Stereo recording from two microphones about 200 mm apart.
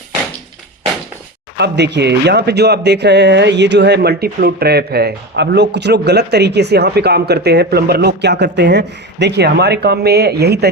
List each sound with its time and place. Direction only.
1.5 s speech: 60° right (ahead or behind)